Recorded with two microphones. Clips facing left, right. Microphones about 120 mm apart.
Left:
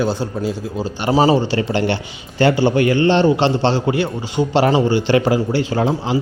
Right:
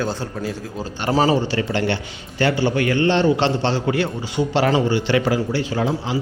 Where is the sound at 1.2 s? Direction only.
30° left (ahead or behind).